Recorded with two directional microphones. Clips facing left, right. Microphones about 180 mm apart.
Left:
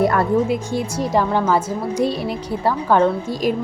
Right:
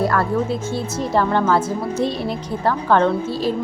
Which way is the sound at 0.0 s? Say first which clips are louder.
Left 3 dB; 20° left (ahead or behind).